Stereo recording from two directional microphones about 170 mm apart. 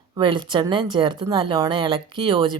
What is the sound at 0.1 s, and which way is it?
Speech, 30° right (ahead or behind).